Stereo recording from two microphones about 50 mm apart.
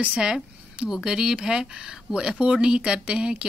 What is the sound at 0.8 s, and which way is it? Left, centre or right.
Speech, centre.